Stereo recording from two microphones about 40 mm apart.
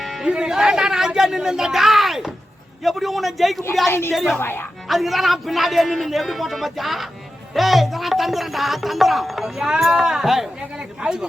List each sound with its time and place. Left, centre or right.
0.2 s speech: centre
2.8 s music: centre
4.4 s speech: left
4.9 s music: centre
10.0 s speech: centre
10.8 s speech: right